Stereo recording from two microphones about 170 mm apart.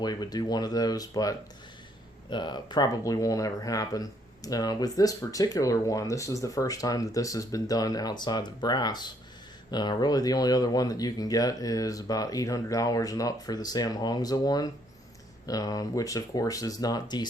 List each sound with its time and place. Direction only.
0.0 s speech: 25° left (ahead or behind)